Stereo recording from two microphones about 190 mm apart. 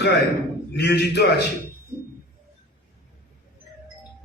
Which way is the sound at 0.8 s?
65° left (ahead or behind).